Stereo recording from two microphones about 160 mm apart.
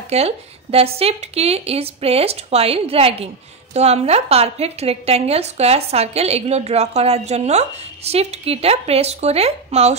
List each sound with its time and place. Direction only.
0.1 s a woman's voice: 40° right (ahead or behind)